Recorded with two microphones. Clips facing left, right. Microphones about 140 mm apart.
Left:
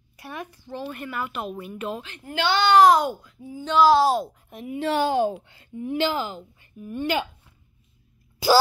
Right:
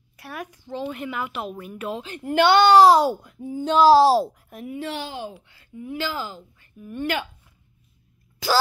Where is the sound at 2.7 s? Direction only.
30° right (ahead or behind).